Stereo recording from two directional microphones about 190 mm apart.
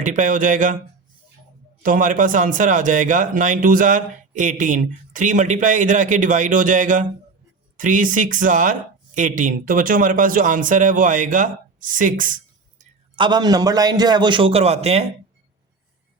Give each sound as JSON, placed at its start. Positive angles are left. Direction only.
{"t": 0.0, "sound": "a man's voice", "side_deg": -45}
{"t": 1.8, "sound": "a man's voice", "side_deg": -45}
{"t": 13.1, "sound": "a man's voice", "side_deg": -25}